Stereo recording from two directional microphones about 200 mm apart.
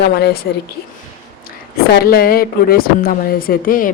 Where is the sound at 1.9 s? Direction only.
50° left (ahead or behind).